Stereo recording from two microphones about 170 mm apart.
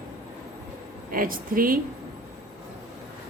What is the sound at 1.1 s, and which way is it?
Speech, 55° right (ahead or behind).